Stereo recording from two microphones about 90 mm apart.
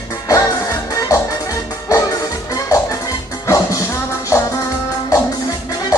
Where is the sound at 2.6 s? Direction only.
40° left (ahead or behind).